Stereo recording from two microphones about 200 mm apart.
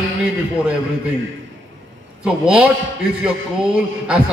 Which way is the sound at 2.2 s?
5° right (ahead or behind).